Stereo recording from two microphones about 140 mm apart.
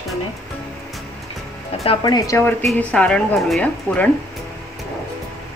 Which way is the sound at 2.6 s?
5° left (ahead or behind).